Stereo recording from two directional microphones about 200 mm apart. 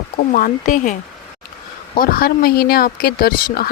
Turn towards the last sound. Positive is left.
turn(degrees=50)  # may be behind; listen again after turning